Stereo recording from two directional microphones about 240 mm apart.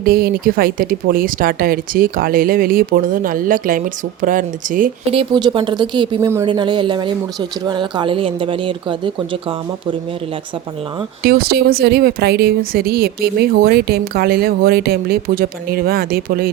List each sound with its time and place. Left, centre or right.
0.0 s speech: right
5.1 s speech: centre
11.2 s speech: right